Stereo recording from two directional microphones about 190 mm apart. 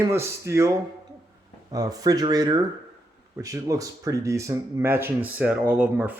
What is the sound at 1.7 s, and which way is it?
Speech, 20° right (ahead or behind).